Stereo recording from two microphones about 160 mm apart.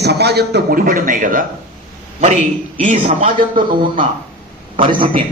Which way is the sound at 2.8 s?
45° right (ahead or behind).